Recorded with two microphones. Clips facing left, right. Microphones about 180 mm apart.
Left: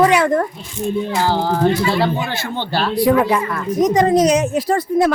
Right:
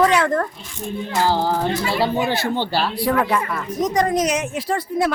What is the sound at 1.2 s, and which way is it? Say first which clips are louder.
Speech: left 2 dB; 10° right (ahead or behind).